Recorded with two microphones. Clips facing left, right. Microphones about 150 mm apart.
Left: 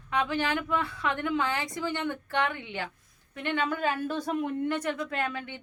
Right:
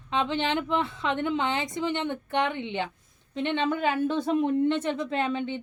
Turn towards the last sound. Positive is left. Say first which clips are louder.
# right 5 dB
turn(degrees=-25)  # may be behind; listen again after turning